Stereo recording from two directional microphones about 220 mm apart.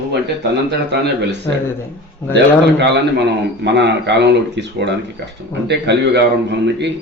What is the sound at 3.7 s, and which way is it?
Speech, 50° right (ahead or behind).